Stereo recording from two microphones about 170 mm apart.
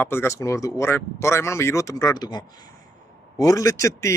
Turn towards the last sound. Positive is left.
turn(degrees=20)  # may be behind; listen again after turning